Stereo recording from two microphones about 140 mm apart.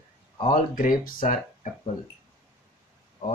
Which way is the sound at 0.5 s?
75° left (ahead or behind).